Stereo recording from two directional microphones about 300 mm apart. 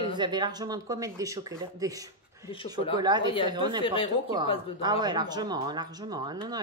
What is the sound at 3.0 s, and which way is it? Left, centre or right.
Speech, centre.